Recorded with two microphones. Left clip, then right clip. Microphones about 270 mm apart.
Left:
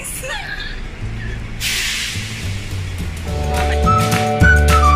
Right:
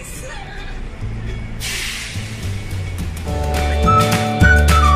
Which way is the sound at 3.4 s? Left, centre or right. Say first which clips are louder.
Left 1 dB; centre.